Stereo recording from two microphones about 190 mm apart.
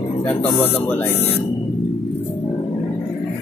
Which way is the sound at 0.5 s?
10° left (ahead or behind).